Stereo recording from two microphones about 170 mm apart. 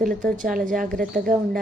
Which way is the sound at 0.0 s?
55° right (ahead or behind).